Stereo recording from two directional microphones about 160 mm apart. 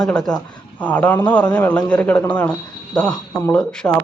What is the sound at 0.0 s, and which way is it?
A man's voice, 5° left (ahead or behind).